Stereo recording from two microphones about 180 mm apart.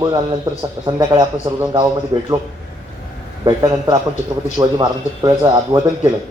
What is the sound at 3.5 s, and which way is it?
Speech, 20° right (ahead or behind).